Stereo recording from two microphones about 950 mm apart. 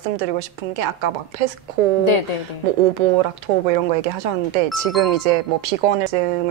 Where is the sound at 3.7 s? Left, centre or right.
Right.